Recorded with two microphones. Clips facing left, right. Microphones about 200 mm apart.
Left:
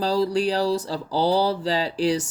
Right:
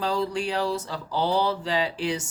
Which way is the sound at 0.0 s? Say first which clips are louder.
Left 5 dB; 35° left (ahead or behind).